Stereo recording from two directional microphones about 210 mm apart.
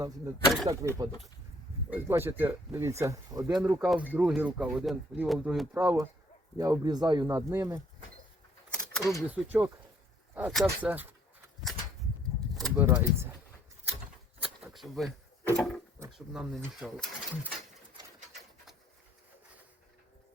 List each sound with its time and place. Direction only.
0.7 s speech: 15° right (ahead or behind); by 5.6 s centre (ahead or behind)
5.7 s speech: 10° right (ahead or behind)
8.7 s speech: centre (ahead or behind)
12.7 s speech: 10° right (ahead or behind)
14.4 s keys jangling: centre (ahead or behind)
15.5 s speech: centre (ahead or behind)